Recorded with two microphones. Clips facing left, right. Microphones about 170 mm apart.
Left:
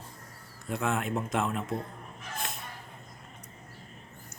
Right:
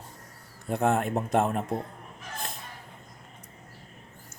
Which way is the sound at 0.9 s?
40° right (ahead or behind).